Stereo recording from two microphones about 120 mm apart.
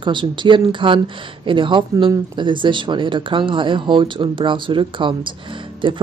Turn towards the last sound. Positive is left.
turn(degrees=-45)  # may be behind; listen again after turning